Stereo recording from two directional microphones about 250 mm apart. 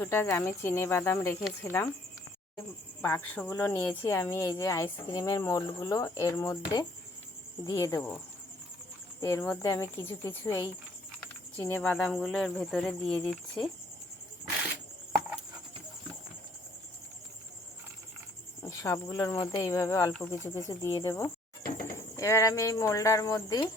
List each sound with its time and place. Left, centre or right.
0.0 s speech: centre
3.0 s speech: centre
9.2 s speech: centre
18.6 s speech: centre